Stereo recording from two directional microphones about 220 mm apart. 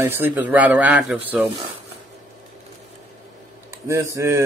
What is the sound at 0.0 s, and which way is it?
Speech, 10° right (ahead or behind).